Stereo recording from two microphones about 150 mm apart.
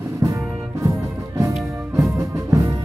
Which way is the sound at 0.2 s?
15° right (ahead or behind).